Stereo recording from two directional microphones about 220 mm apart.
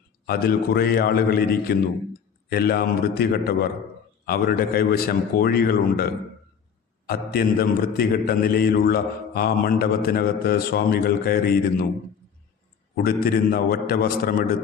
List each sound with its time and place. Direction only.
0.3 s a man's voice: 45° left (ahead or behind)
13.0 s a man's voice: 45° left (ahead or behind)